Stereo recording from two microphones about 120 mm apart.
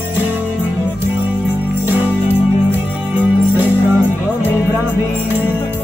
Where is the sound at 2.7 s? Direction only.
15° right (ahead or behind).